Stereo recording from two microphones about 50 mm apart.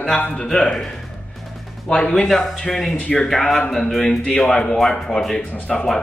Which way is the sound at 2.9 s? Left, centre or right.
Centre.